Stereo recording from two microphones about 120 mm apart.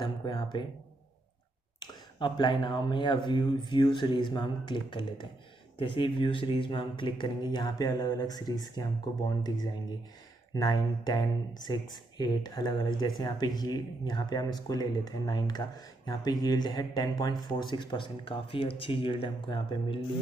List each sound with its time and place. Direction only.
0.0 s speech: 35° left (ahead or behind)
1.8 s speech: 40° left (ahead or behind)
10.5 s speech: 35° left (ahead or behind)